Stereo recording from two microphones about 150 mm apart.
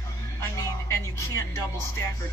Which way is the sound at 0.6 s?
20° left (ahead or behind).